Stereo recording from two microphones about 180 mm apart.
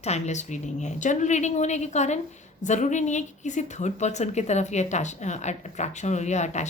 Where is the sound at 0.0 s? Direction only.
40° left (ahead or behind).